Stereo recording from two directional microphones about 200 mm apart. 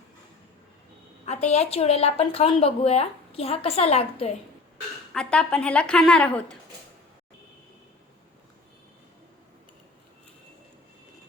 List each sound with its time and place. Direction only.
1.2 s a woman's voice: 30° left (ahead or behind)
5.1 s a woman's voice: 5° left (ahead or behind)